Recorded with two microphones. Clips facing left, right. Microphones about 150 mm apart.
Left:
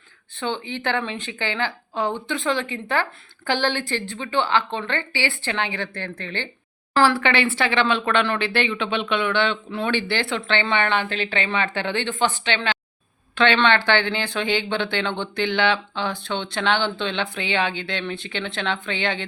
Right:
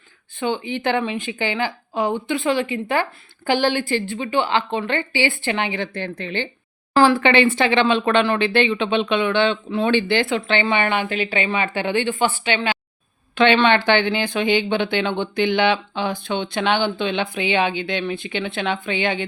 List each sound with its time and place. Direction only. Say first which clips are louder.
0.3 s speech: right 4 dB; 10° right (ahead or behind)